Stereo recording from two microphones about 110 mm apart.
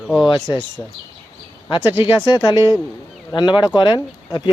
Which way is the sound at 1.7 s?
50° left (ahead or behind).